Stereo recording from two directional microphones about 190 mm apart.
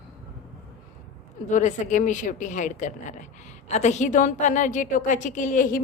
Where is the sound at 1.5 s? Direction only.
40° left (ahead or behind).